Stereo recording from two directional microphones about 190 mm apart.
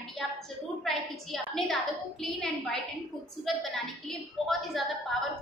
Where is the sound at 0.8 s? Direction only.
Centre (ahead or behind).